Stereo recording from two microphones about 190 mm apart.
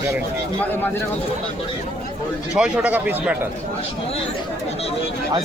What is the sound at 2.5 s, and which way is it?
Speech, 5° right (ahead or behind).